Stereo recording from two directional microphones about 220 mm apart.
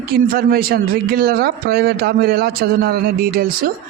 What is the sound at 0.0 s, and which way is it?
Speech, 45° right (ahead or behind).